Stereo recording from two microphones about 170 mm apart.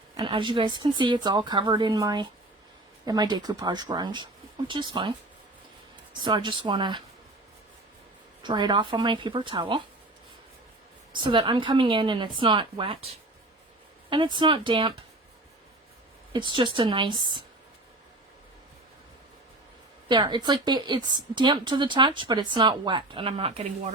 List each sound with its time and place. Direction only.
0.2 s a woman's voice: 30° right (ahead or behind)
6.2 s a woman's voice: 30° right (ahead or behind)
8.4 s a woman's voice: 25° right (ahead or behind)
11.1 s a woman's voice: 30° right (ahead or behind)
14.1 s a woman's voice: 30° right (ahead or behind)
16.3 s a woman's voice: 30° right (ahead or behind)
20.1 s a woman's voice: 25° right (ahead or behind)